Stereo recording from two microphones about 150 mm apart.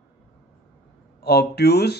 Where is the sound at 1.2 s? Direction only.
90° left.